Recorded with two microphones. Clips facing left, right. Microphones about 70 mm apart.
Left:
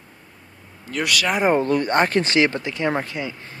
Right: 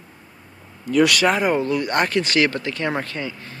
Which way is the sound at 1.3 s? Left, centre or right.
Left.